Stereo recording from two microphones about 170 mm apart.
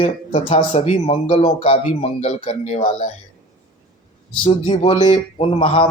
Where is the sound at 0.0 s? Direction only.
30° left (ahead or behind).